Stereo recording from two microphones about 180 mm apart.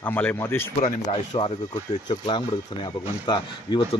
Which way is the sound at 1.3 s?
25° left (ahead or behind).